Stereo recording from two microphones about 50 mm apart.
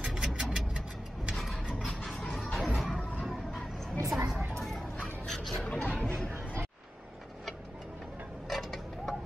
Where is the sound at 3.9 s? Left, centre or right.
Right.